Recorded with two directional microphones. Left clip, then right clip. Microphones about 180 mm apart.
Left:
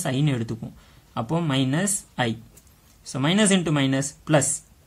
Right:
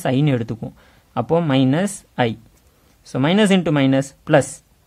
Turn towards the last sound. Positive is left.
turn(degrees=-45)  # may be behind; listen again after turning